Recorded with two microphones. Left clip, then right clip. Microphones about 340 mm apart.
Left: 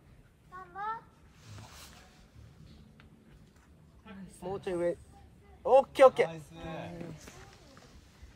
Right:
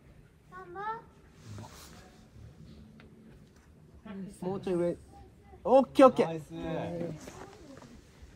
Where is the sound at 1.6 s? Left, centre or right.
Centre.